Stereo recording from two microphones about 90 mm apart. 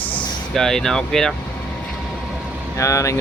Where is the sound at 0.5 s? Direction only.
5° left (ahead or behind).